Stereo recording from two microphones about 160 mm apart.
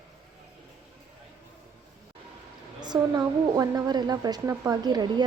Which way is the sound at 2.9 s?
25° right (ahead or behind).